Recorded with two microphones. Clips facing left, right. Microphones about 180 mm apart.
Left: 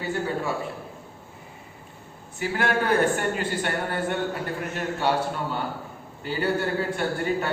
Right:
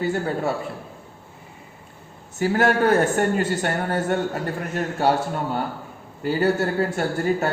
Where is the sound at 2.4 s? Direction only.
40° right (ahead or behind).